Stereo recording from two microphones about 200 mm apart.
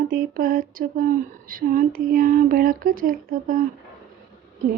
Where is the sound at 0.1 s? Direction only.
45° right (ahead or behind).